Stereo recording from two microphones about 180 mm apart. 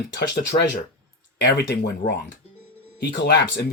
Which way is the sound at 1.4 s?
70° left (ahead or behind).